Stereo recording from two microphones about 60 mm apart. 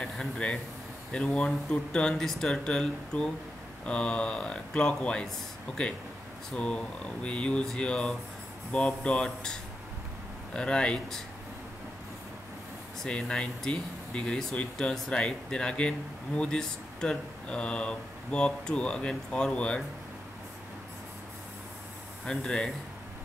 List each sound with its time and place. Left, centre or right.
0.0 s speech: centre
6.5 s speech: centre
13.0 s speech: centre
22.2 s speech: centre